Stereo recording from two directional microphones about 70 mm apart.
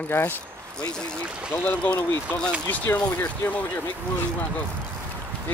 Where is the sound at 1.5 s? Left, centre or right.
Left.